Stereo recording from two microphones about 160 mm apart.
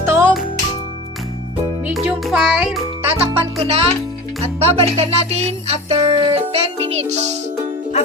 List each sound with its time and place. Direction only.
0.0 s music: 15° right (ahead or behind)
1.8 s music: 5° right (ahead or behind)
3.6 s music: 40° right (ahead or behind)